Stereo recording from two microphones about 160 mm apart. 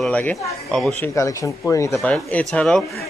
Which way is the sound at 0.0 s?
10° left (ahead or behind).